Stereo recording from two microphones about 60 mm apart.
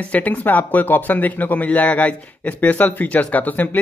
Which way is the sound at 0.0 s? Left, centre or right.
Left.